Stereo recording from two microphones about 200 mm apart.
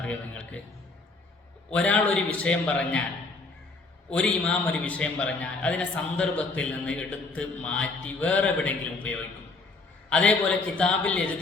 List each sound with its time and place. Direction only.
0.0 s a man's voice: 5° left (ahead or behind)
1.7 s a man's voice: 5° left (ahead or behind)
4.1 s a man's voice: 5° left (ahead or behind)